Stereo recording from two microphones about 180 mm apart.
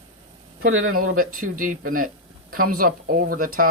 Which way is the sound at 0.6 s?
50° right (ahead or behind).